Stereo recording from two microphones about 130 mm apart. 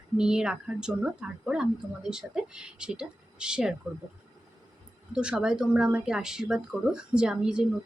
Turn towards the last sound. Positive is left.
turn(degrees=-5)  # may be behind; listen again after turning